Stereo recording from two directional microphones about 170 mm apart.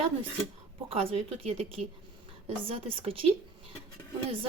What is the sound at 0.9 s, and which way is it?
Speech, 35° right (ahead or behind).